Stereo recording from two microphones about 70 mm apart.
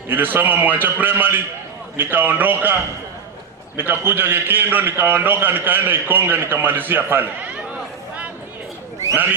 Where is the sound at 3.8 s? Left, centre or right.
Right.